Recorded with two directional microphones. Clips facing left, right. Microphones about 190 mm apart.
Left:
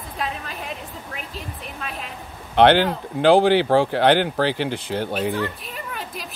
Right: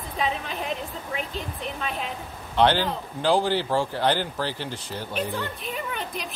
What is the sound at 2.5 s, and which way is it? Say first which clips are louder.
Speech: left 6 dB; 65° left (ahead or behind).